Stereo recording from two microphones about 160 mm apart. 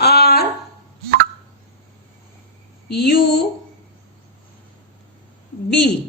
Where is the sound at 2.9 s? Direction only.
85° left.